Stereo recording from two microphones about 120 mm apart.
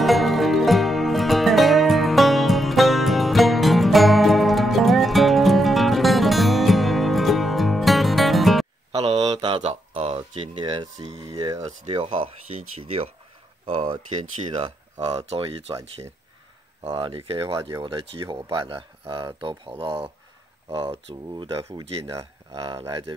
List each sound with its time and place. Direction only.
0.0 s music: centre (ahead or behind)
8.9 s a sound: 55° right (ahead or behind)
12.7 s speech: 55° right (ahead or behind)
15.1 s speech: 55° right (ahead or behind)
16.9 s speech: 50° right (ahead or behind)
20.7 s speech: 35° right (ahead or behind)
21.1 s speech: 45° right (ahead or behind)
22.0 s speech: 30° right (ahead or behind)